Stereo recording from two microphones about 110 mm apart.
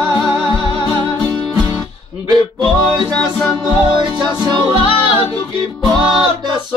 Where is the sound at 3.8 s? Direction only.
45° right (ahead or behind).